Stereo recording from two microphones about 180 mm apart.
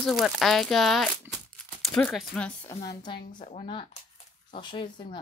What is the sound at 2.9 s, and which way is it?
A woman's voice, 25° left (ahead or behind).